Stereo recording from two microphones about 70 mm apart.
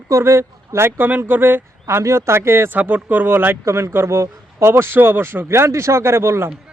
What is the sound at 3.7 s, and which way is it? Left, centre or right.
Speech, right.